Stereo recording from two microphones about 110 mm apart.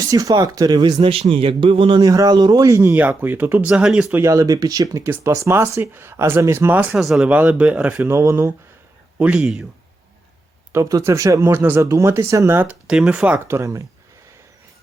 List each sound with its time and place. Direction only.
0.1 s speech: 30° right (ahead or behind)
1.0 s speech: 60° right (ahead or behind)
2.0 s speech: 35° right (ahead or behind)
2.9 s speech: 15° right (ahead or behind)
4.1 s speech: 25° right (ahead or behind)
6.9 s speech: 5° right (ahead or behind); by 8.5 s 25° right (ahead or behind)
9.1 s speech: 10° right (ahead or behind)
10.7 s speech: 30° right (ahead or behind)
11.4 s speech: 20° right (ahead or behind)
12.9 s speech: 5° right (ahead or behind)
13.5 s speech: 30° right (ahead or behind)